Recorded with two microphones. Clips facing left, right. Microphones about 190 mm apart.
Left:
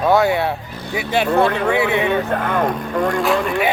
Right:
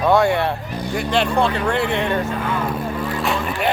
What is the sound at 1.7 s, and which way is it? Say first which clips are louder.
Speech: left 3 dB; 60° left (ahead or behind).